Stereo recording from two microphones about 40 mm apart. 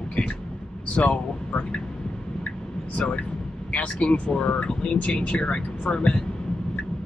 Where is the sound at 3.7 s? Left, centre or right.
Left.